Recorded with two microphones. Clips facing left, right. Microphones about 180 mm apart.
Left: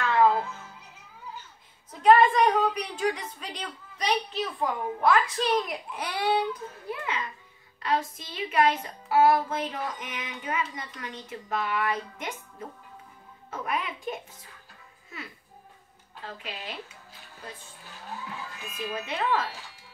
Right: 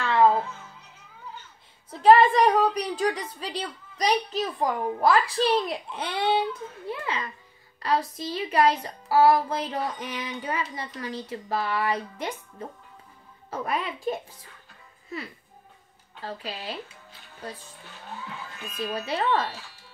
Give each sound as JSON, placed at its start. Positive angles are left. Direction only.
{"t": 0.0, "sound": "music", "side_deg": -30}
{"t": 1.9, "sound": "a woman's voice", "side_deg": -35}
{"t": 16.3, "sound": "a woman's voice", "side_deg": -35}
{"t": 18.9, "sound": "a woman's voice", "side_deg": -35}